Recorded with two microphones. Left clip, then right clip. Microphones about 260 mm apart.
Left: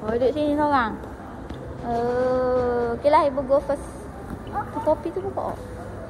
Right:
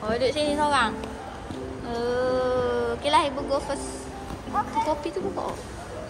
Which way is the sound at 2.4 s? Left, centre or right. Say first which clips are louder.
Left 2 dB; centre.